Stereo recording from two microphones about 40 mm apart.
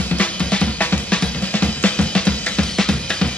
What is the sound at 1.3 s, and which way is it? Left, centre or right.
Music, left.